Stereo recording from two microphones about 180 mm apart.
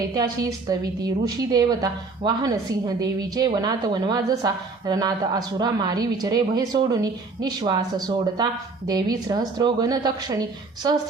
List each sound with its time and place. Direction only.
0.0 s a woman's voice: 20° right (ahead or behind)